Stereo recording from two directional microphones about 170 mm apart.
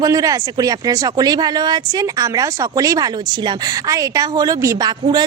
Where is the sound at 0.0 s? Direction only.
20° right (ahead or behind).